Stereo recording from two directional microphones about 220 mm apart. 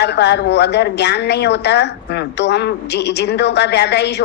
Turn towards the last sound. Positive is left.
turn(degrees=50)  # may be behind; listen again after turning